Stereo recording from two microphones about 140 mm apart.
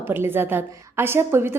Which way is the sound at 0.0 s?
15° right (ahead or behind).